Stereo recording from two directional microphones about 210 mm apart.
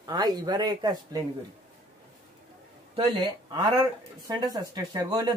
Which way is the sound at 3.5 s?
20° right (ahead or behind).